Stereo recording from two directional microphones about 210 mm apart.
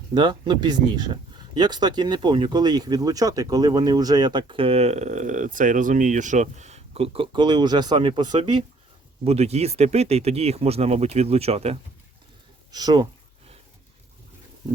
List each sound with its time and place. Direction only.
0.1 s speech: 20° right (ahead or behind)